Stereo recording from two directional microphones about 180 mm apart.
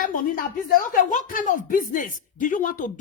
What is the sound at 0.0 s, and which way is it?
Speech, 50° left (ahead or behind).